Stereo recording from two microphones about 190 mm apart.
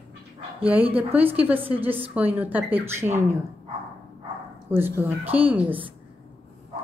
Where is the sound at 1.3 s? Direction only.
10° right (ahead or behind).